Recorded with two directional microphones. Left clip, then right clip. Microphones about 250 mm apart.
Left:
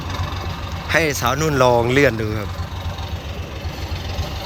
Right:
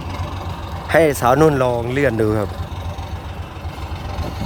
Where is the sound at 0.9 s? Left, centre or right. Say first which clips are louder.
Right 5 dB; centre.